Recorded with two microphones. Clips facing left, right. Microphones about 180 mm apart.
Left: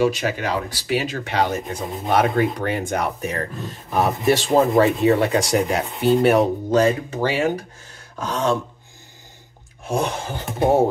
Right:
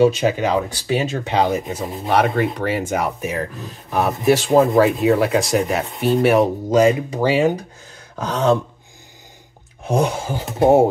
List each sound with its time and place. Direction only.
0.0 s speech: 25° right (ahead or behind)
1.5 s speech: 5° right (ahead or behind)
6.7 s speech: 15° right (ahead or behind)
9.8 s speech: 15° right (ahead or behind)